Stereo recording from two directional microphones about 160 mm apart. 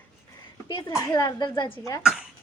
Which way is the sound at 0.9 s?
20° left (ahead or behind).